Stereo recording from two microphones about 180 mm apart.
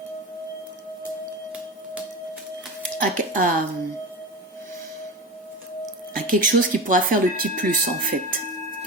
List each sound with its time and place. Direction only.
3.0 s speech: 50° right (ahead or behind)
6.2 s speech: 50° right (ahead or behind)